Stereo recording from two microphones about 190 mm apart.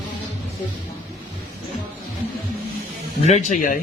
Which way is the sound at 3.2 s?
35° left (ahead or behind).